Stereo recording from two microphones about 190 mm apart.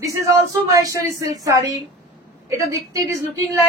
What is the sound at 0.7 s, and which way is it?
Speech, 20° right (ahead or behind).